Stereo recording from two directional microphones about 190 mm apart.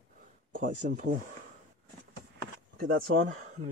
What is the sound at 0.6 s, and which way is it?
Speech, 45° right (ahead or behind).